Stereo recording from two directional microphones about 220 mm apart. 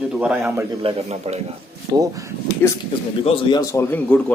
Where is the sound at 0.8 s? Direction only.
30° right (ahead or behind).